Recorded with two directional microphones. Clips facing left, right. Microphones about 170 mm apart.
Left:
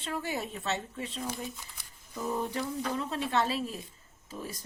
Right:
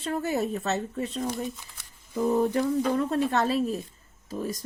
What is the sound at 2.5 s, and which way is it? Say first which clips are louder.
Speech: right 9 dB; 55° right (ahead or behind).